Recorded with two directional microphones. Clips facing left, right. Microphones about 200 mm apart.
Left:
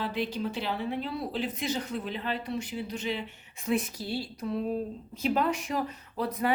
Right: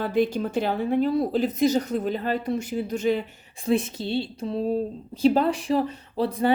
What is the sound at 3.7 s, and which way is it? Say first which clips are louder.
Speech: right 6 dB; 25° right (ahead or behind).